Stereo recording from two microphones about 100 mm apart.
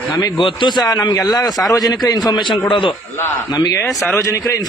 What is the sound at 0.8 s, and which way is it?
A man's voice, 40° left (ahead or behind).